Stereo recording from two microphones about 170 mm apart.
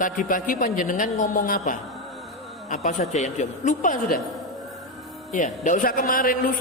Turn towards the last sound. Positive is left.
turn(degrees=55)  # may be behind; listen again after turning